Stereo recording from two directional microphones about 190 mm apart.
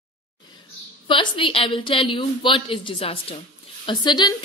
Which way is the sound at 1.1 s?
25° left (ahead or behind).